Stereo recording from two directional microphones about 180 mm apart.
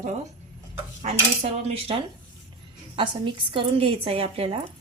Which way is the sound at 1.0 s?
35° right (ahead or behind).